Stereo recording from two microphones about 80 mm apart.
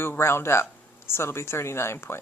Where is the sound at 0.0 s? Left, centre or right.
Left.